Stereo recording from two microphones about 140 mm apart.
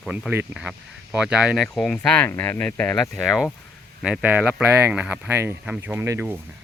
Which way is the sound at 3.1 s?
5° right (ahead or behind).